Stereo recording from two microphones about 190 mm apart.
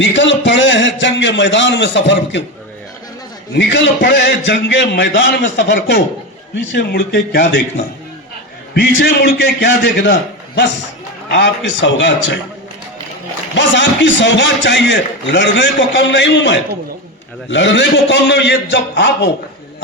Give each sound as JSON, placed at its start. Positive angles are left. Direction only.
{"t": 0.0, "sound": "a man's voice", "side_deg": 75}
{"t": 3.5, "sound": "a man's voice", "side_deg": 65}
{"t": 8.7, "sound": "a man's voice", "side_deg": 60}
{"t": 13.6, "sound": "a man's voice", "side_deg": 70}